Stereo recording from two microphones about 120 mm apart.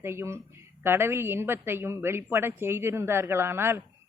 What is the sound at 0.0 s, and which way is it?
Speech, 20° right (ahead or behind).